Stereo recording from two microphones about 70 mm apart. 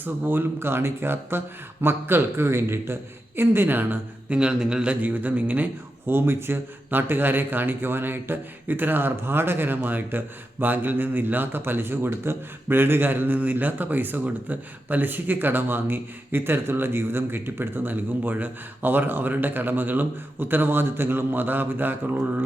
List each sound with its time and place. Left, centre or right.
0.0 s a man's voice: right
4.4 s speech: centre
6.1 s speech: right